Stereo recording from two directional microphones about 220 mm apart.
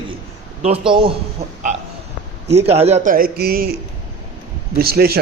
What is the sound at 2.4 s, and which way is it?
A man's voice, 30° right (ahead or behind).